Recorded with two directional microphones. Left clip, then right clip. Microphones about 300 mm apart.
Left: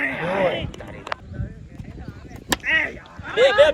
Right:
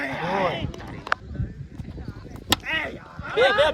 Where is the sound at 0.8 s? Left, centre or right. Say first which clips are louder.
Left 2 dB; right.